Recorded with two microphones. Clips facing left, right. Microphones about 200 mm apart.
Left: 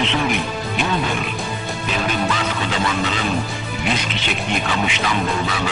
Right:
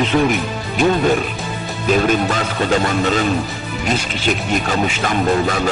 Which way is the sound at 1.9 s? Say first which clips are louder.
Right 7 dB; 45° right (ahead or behind).